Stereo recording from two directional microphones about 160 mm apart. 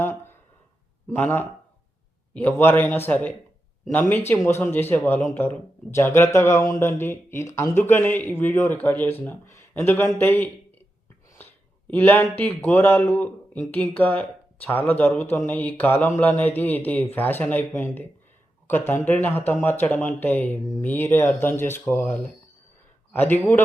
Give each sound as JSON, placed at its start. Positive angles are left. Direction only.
{"t": 0.0, "sound": "a sound", "side_deg": 15}
{"t": 1.1, "sound": "speech", "side_deg": 10}
{"t": 11.9, "sound": "speech", "side_deg": 10}